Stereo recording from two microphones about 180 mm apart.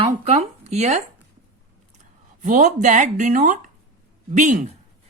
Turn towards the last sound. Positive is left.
turn(degrees=-45)  # may be behind; listen again after turning